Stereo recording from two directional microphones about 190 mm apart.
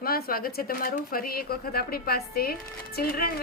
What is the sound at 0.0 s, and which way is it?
A woman's voice, 50° left (ahead or behind).